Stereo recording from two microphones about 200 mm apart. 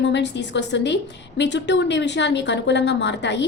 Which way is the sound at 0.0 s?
60° left (ahead or behind).